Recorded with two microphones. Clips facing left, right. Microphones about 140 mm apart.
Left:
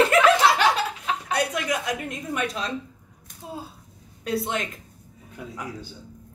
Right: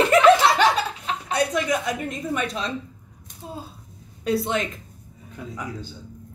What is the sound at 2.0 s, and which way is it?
Speech, 30° right (ahead or behind).